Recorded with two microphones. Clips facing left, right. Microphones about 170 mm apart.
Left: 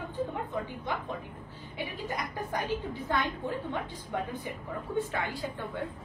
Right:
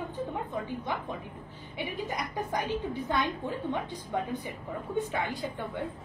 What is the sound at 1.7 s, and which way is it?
Speech, 20° right (ahead or behind).